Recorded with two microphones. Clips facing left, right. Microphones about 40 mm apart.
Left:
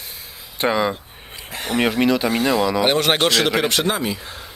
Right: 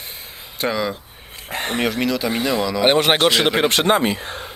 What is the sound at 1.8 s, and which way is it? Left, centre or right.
Speech, centre.